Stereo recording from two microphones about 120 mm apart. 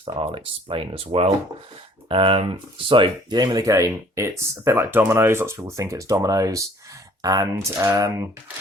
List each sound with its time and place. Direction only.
0.0 s speech: 45° right (ahead or behind); by 8.1 s 25° right (ahead or behind)